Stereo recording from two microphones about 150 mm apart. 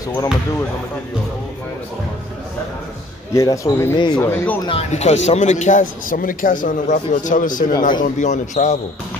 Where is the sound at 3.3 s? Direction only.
20° left (ahead or behind).